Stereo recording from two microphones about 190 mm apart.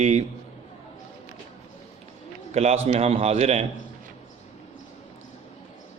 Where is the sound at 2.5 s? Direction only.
35° right (ahead or behind).